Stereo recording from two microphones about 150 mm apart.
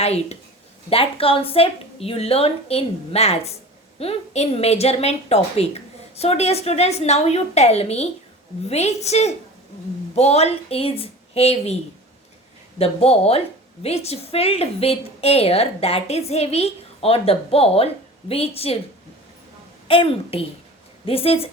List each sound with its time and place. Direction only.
0.0 s a woman's voice: 45° left (ahead or behind)
12.8 s a woman's voice: 40° left (ahead or behind)
19.9 s a woman's voice: 35° left (ahead or behind)